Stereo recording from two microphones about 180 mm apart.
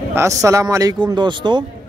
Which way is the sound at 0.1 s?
15° right (ahead or behind).